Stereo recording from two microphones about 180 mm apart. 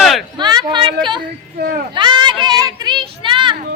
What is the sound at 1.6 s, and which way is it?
Speech, 60° right (ahead or behind).